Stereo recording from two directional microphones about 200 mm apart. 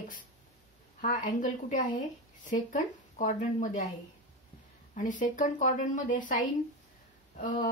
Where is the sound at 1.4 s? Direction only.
40° left (ahead or behind).